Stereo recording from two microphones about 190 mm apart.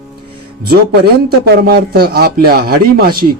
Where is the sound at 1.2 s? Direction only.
55° right (ahead or behind).